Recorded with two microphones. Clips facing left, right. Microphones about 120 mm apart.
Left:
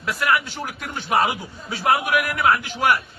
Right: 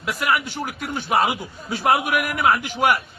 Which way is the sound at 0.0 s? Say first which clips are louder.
Left 1 dB; 15° right (ahead or behind).